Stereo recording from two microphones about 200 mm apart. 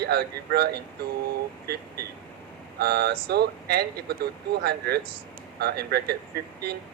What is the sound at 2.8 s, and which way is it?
Speech, 50° right (ahead or behind).